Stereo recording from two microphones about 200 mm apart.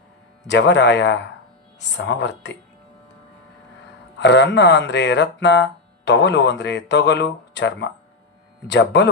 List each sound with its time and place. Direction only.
0.4 s speech: 60° left (ahead or behind)
4.2 s speech: 60° left (ahead or behind)